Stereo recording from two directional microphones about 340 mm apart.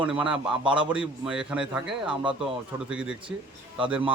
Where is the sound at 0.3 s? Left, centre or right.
Centre.